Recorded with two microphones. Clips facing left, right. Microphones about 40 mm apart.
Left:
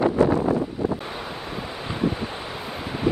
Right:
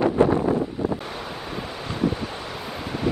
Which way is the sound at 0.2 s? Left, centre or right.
Right.